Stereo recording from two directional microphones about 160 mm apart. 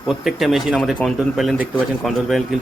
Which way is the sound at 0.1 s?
Centre (ahead or behind).